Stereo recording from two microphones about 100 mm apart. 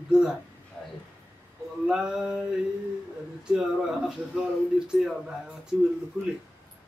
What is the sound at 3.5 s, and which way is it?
Speech, 10° right (ahead or behind).